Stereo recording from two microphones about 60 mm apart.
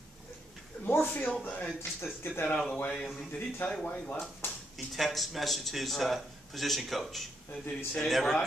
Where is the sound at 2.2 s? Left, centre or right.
Left.